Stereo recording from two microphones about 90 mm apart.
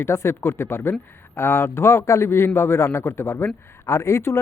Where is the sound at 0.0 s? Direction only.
30° left (ahead or behind).